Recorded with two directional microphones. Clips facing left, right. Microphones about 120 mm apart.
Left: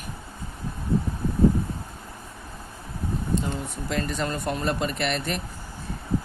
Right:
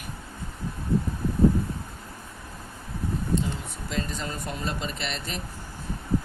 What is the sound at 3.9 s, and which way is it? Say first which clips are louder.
Speech: left 4 dB; 65° left (ahead or behind).